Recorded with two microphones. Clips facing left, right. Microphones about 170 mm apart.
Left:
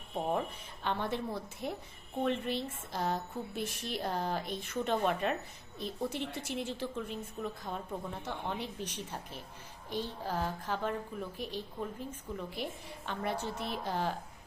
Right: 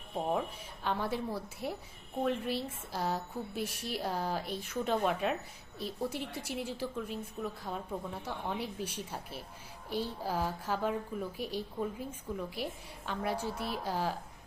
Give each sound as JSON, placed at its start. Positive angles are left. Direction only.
{"t": 0.1, "sound": "a woman's voice", "side_deg": -10}